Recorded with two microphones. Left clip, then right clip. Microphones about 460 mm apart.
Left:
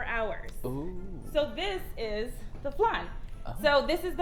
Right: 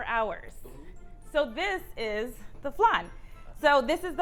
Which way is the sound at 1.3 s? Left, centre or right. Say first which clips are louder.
Right 2 dB; right.